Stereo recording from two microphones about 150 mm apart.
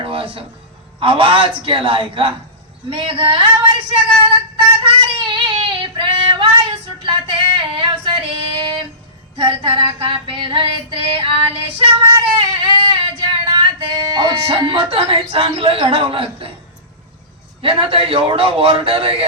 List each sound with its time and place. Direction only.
0.0 s music: 35° right (ahead or behind)
0.9 s a man's voice: 35° right (ahead or behind)
4.2 s child singing: 35° right (ahead or behind)
7.0 s female singing: 35° right (ahead or behind)
9.4 s a man's voice: 35° right (ahead or behind)
12.1 s female singing: 30° right (ahead or behind)
17.6 s a man's voice: 35° right (ahead or behind)